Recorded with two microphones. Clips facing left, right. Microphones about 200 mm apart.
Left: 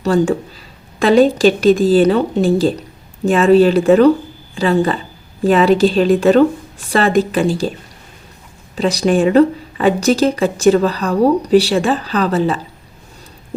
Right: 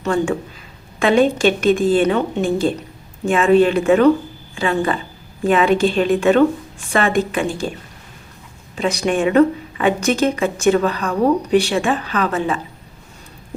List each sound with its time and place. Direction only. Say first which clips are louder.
0.0 s speech: left 4 dB; 35° left (ahead or behind)
8.7 s speech: left 4 dB; 35° left (ahead or behind)